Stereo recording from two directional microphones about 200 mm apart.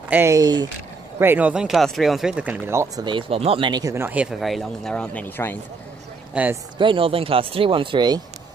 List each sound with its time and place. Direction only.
0.1 s speech: 15° right (ahead or behind); by 5.6 s 10° left (ahead or behind)
6.3 s speech: 10° right (ahead or behind)
6.8 s speech: 25° right (ahead or behind)